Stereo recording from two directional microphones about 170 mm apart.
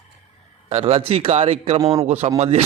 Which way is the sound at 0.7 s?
35° right (ahead or behind).